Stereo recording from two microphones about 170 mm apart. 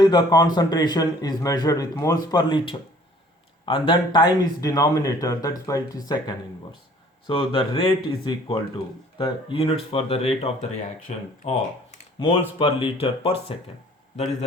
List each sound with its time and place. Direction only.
0.0 s a man's voice: 25° left (ahead or behind)